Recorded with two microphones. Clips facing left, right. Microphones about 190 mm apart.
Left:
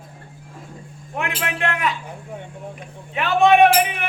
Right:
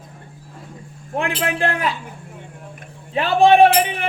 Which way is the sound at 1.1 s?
30° right (ahead or behind).